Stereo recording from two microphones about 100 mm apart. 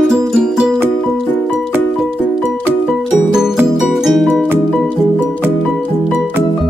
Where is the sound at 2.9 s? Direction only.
5° right (ahead or behind).